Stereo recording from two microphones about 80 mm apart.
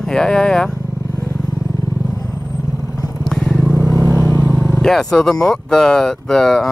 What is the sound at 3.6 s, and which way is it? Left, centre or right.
Vehicle, right.